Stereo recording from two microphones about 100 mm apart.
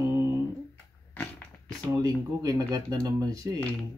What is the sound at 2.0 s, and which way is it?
Speech, 35° right (ahead or behind).